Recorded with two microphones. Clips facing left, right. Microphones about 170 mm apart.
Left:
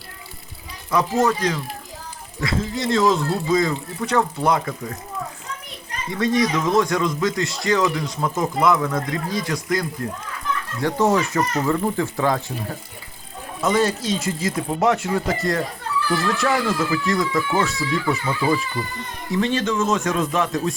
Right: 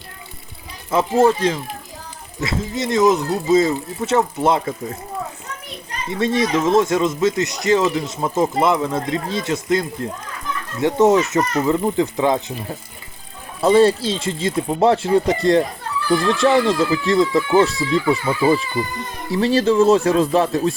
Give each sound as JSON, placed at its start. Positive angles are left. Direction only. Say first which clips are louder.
{"t": 0.9, "sound": "speech", "louder": "right 4 dB", "side_deg": -25}
{"t": 6.1, "sound": "speech", "louder": "right 1 dB", "side_deg": -25}
{"t": 13.6, "sound": "speech", "louder": "right 7 dB", "side_deg": -30}